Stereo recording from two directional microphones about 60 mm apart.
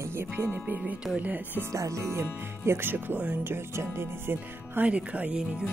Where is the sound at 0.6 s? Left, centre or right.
Right.